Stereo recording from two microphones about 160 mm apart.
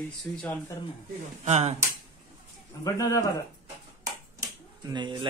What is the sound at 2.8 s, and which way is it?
Speech, 20° left (ahead or behind).